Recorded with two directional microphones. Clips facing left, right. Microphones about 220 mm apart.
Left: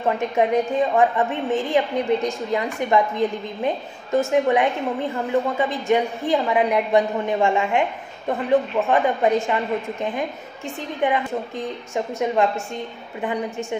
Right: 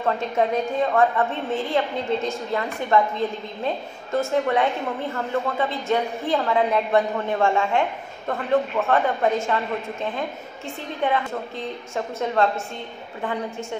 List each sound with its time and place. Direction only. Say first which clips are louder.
0.0 s a woman's voice: left 2 dB; 15° left (ahead or behind)
11.0 s a woman's voice: left 2 dB; 15° left (ahead or behind)